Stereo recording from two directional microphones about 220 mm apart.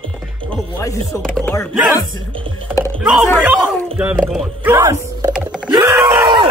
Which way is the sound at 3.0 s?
5° right (ahead or behind).